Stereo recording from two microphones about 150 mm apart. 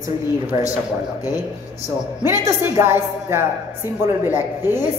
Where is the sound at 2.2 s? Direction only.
20° right (ahead or behind).